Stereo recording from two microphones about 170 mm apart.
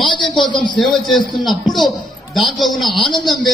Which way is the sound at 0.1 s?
25° left (ahead or behind).